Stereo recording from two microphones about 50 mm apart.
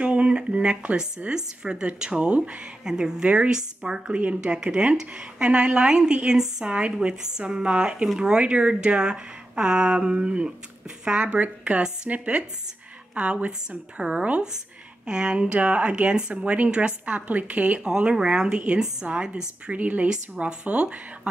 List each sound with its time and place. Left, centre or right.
0.0 s speech: right
19.8 s speech: right